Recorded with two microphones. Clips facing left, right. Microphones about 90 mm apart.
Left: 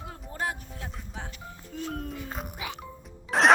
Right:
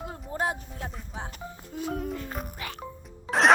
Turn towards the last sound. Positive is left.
turn(degrees=0)  # may be behind; listen again after turning